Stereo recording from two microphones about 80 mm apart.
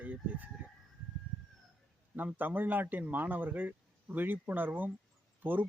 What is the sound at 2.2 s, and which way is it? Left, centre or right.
Speech, right.